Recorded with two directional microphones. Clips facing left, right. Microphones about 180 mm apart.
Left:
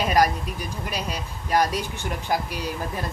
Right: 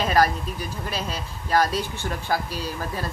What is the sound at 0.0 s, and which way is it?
Speech, 15° left (ahead or behind).